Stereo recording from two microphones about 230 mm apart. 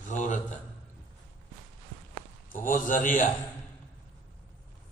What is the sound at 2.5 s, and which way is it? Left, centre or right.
Speech, left.